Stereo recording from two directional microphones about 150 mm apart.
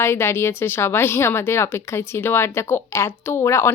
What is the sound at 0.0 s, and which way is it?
Speech, 15° left (ahead or behind).